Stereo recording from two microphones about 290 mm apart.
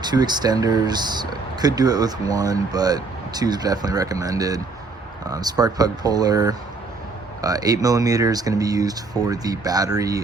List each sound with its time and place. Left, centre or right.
0.0 s speech: centre